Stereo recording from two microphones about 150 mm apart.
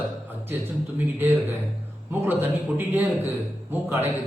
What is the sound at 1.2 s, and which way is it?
Speech, 15° right (ahead or behind).